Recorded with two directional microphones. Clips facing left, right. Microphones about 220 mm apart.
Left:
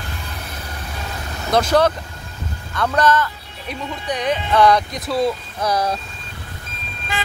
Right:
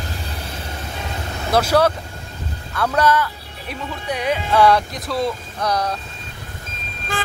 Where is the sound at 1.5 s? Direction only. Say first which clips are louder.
Even; 10° right (ahead or behind).